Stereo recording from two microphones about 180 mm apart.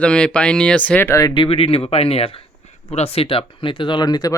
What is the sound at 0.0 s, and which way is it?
Speech, 5° left (ahead or behind).